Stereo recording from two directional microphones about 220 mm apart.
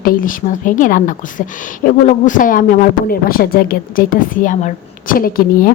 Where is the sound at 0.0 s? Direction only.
40° left (ahead or behind).